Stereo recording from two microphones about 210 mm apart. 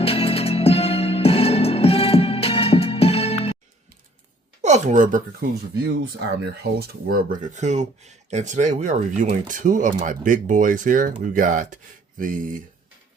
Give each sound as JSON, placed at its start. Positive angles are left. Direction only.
{"t": 0.0, "sound": "music", "side_deg": 25}
{"t": 4.6, "sound": "speech", "side_deg": -35}
{"t": 6.3, "sound": "speech", "side_deg": -50}